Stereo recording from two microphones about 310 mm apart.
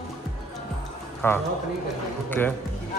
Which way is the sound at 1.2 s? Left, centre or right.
Centre.